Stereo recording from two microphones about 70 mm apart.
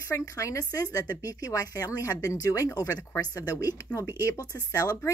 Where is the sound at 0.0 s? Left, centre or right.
Left.